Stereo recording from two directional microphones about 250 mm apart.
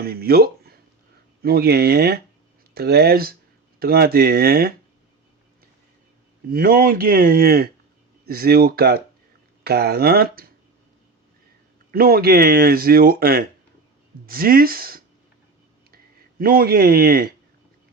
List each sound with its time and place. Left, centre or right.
0.0 s speech: right
6.5 s speech: right
11.9 s speech: right
16.4 s speech: right